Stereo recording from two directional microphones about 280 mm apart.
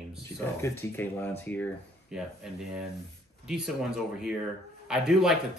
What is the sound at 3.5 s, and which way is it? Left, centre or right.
Speech, centre.